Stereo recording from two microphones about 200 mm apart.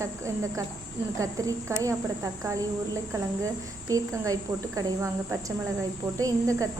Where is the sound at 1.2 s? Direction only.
15° right (ahead or behind).